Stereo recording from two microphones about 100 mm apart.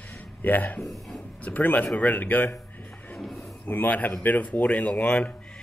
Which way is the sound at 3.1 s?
Centre (ahead or behind).